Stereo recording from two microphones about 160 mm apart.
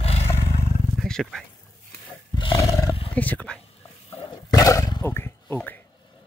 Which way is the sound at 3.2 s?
10° left (ahead or behind).